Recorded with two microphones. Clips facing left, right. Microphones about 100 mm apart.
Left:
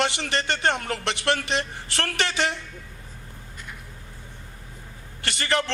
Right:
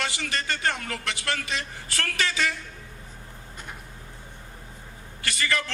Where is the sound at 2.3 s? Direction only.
25° left (ahead or behind).